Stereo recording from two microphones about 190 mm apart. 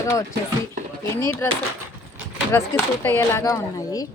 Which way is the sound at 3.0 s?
10° left (ahead or behind).